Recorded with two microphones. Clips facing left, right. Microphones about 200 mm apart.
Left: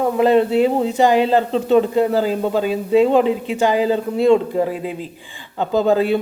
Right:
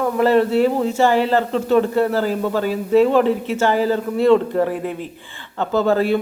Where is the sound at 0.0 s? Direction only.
20° left (ahead or behind).